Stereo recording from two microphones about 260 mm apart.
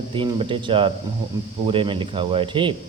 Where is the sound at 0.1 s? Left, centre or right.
Centre.